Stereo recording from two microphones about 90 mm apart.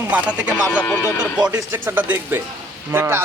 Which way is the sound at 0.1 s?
15° right (ahead or behind).